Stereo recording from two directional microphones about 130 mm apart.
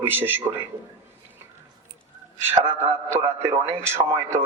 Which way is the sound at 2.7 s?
20° right (ahead or behind).